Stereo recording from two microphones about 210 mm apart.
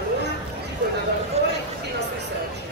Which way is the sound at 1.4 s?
30° right (ahead or behind).